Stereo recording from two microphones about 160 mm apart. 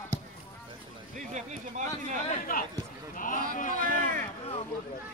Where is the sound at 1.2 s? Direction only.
50° right (ahead or behind).